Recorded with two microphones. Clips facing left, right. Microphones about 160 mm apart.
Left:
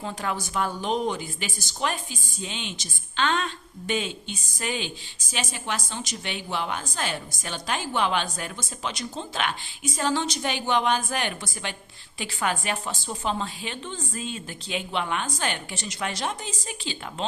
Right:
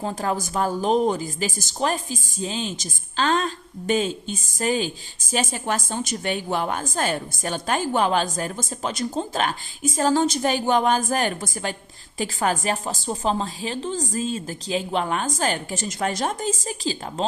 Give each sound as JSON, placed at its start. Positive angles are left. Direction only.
{"t": 0.0, "sound": "a woman's voice", "side_deg": -40}